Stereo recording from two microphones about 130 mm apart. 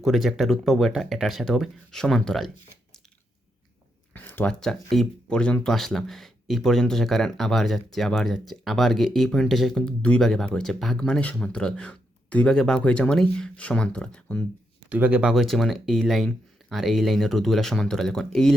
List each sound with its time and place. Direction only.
0.0 s speech: centre (ahead or behind)
4.1 s speech: 15° left (ahead or behind)
14.8 s speech: 10° right (ahead or behind); by 18.5 s 5° left (ahead or behind)